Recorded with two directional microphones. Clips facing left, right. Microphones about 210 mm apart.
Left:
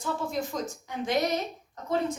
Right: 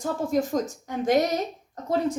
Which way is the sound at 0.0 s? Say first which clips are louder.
Right 6 dB; 45° right (ahead or behind).